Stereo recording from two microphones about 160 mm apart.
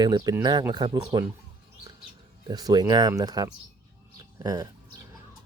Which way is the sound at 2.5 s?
25° right (ahead or behind).